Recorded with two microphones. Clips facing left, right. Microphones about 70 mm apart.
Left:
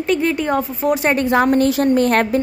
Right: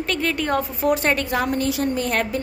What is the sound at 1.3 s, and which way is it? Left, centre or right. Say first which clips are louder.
A woman's voice: left 7 dB; left.